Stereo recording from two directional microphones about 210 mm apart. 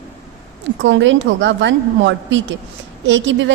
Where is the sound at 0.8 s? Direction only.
60° right (ahead or behind).